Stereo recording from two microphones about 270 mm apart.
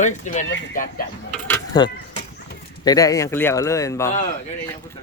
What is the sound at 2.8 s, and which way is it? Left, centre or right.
Speech, centre.